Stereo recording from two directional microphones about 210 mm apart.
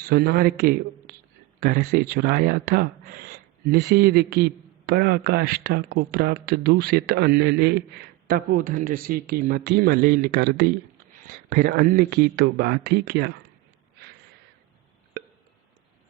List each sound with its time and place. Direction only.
0.0 s speech: 45° right (ahead or behind)